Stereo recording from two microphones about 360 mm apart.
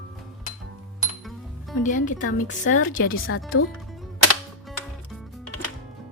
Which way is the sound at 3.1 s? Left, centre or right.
Left.